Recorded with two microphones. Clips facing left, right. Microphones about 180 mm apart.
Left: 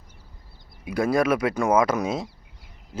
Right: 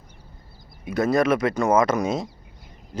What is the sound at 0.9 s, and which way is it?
Speech, 10° left (ahead or behind).